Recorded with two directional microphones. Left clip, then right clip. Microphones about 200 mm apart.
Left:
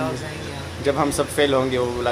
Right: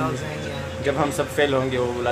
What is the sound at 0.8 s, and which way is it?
Speech, 30° left (ahead or behind).